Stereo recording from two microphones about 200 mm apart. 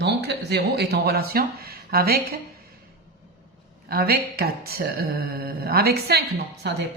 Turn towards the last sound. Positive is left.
turn(degrees=-55)  # may be behind; listen again after turning